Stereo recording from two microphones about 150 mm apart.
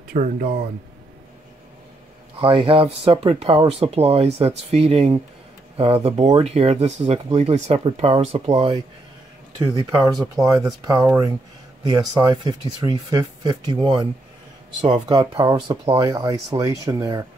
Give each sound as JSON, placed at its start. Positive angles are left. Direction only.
{"t": 0.1, "sound": "speech", "side_deg": -70}
{"t": 2.4, "sound": "speech", "side_deg": -35}
{"t": 9.8, "sound": "speech", "side_deg": -20}